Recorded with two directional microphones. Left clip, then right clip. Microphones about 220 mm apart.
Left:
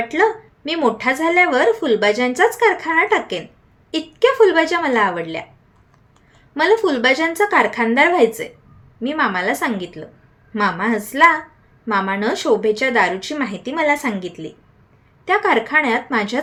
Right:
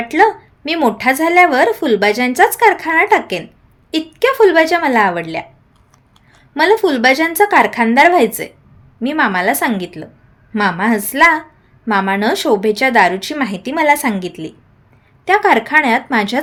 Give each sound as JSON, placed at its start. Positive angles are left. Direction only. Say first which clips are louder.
{"t": 0.1, "sound": "a woman's voice", "louder": "right 8 dB", "side_deg": -40}
{"t": 6.5, "sound": "a woman's voice", "louder": "right 3 dB", "side_deg": -40}